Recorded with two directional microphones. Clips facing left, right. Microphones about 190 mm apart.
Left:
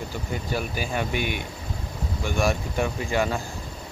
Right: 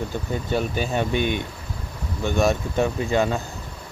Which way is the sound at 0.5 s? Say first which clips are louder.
Right 5 dB; 25° right (ahead or behind).